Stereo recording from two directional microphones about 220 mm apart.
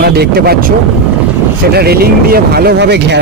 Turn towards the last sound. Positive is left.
turn(degrees=-50)  # may be behind; listen again after turning